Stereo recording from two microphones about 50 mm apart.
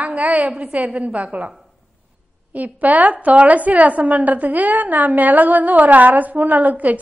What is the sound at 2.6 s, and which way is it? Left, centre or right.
A woman's voice, right.